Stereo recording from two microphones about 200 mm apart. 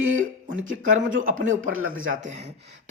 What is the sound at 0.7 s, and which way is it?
Speech, 40° right (ahead or behind).